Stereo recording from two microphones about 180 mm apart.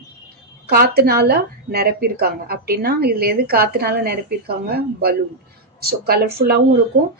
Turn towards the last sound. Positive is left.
turn(degrees=-80)